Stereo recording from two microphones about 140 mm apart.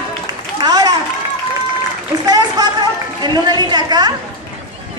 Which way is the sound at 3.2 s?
30° right (ahead or behind).